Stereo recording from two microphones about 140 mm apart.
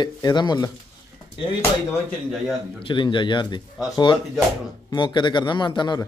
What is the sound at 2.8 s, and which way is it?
Speech, 35° left (ahead or behind).